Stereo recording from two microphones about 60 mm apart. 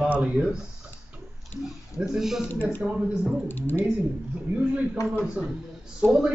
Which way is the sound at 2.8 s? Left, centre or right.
Centre.